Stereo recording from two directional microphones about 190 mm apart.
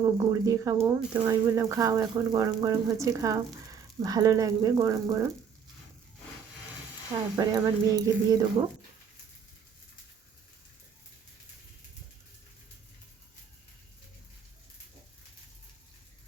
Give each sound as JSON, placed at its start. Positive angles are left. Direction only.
{"t": 0.0, "sound": "speech", "side_deg": -15}
{"t": 7.3, "sound": "speech", "side_deg": -20}